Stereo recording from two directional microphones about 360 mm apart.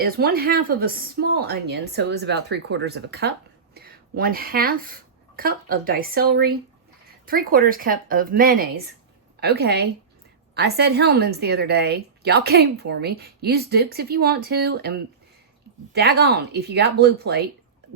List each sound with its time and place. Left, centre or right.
0.0 s a woman's voice: right